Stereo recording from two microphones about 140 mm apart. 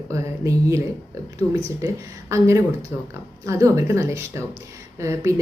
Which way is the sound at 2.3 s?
20° right (ahead or behind).